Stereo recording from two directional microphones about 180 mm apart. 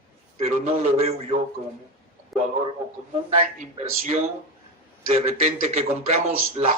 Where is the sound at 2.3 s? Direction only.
Centre (ahead or behind).